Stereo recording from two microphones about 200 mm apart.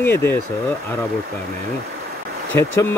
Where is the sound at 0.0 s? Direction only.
10° left (ahead or behind).